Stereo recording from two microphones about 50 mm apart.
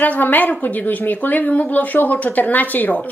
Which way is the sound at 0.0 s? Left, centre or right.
Left.